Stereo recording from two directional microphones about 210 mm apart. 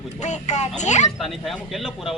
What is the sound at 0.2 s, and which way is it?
Speech, 35° left (ahead or behind).